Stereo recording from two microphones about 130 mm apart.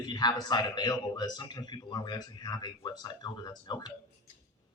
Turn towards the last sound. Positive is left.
turn(degrees=35)  # may be behind; listen again after turning